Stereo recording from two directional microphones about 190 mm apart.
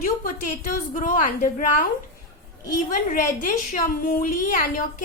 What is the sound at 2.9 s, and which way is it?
A woman's voice, 45° left (ahead or behind).